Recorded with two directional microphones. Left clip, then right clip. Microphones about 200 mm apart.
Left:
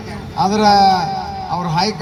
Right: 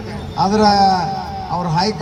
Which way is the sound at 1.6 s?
10° left (ahead or behind).